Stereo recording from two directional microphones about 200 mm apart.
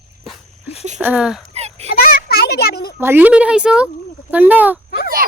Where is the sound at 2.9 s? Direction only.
10° right (ahead or behind).